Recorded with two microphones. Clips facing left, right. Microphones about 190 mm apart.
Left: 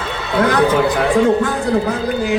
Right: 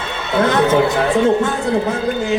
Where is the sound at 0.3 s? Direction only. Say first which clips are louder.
Even; 25° right (ahead or behind).